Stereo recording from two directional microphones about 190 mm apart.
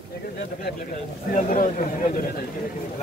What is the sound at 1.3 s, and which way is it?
Speech, 45° left (ahead or behind).